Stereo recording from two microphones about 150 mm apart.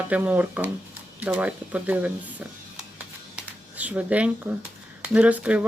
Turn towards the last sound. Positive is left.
turn(degrees=-10)  # may be behind; listen again after turning